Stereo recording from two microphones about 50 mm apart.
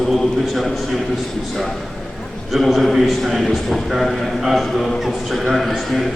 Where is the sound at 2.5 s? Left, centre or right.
Centre.